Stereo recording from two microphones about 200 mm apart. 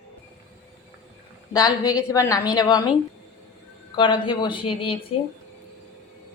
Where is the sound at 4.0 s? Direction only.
25° left (ahead or behind).